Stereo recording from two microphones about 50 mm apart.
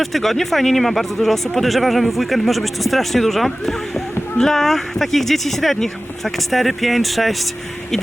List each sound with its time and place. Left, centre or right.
0.0 s speech: centre